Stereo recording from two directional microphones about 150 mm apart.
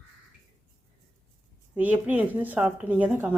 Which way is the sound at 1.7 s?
10° right (ahead or behind).